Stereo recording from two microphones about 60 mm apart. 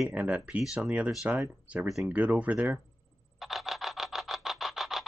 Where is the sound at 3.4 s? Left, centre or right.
Centre.